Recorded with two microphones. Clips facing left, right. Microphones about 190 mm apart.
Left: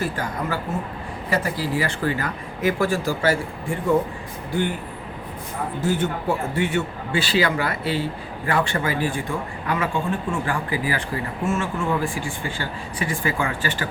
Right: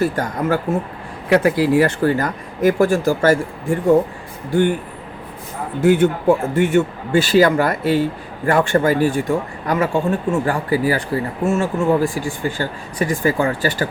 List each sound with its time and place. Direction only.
0.0 s speech: 45° right (ahead or behind)
1.3 s speech: 70° right (ahead or behind)
1.9 s speech: 45° right (ahead or behind)
5.8 s speech: 55° right (ahead or behind); by 13.8 s 40° right (ahead or behind)